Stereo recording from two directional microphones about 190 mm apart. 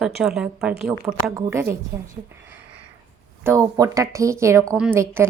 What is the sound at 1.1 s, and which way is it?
Speech, 15° right (ahead or behind).